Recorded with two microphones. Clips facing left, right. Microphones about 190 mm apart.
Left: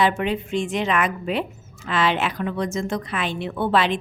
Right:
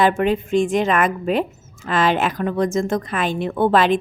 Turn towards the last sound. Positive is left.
turn(degrees=-50)  # may be behind; listen again after turning